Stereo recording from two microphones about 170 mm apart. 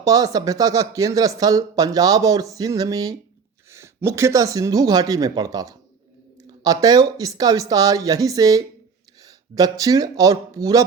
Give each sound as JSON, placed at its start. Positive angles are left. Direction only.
{"t": 0.0, "sound": "speech", "side_deg": -20}